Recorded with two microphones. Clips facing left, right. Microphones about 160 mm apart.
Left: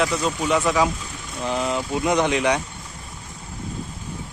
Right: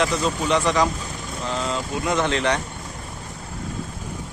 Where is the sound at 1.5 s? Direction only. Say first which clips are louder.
Left 3 dB; 20° left (ahead or behind).